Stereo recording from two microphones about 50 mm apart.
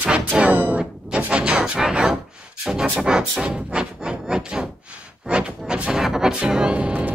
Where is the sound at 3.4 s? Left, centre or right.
Centre.